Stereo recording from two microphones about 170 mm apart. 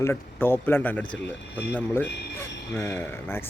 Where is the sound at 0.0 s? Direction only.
15° left (ahead or behind).